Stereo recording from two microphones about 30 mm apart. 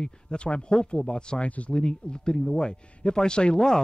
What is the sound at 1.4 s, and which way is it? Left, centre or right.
Speech, left.